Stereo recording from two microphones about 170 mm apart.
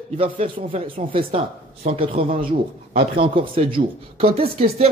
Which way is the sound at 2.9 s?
70° right (ahead or behind).